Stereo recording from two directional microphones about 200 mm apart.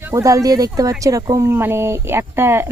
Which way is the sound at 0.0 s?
15° right (ahead or behind).